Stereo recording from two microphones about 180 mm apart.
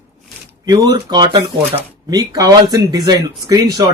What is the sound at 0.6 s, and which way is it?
Speech, 25° right (ahead or behind).